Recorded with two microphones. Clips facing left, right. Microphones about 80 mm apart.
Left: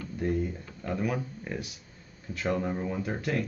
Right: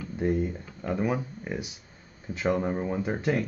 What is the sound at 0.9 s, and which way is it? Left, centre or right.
Speech, right.